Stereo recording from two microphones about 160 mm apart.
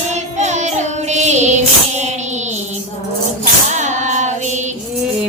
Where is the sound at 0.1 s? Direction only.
45° right (ahead or behind).